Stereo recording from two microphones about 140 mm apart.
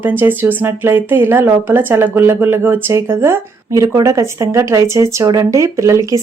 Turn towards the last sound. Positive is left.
turn(degrees=-20)  # may be behind; listen again after turning